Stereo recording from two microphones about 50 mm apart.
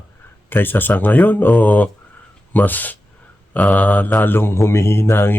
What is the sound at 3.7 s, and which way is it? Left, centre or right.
Mantra, left.